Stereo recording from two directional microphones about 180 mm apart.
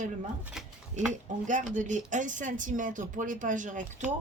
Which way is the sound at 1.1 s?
45° right (ahead or behind).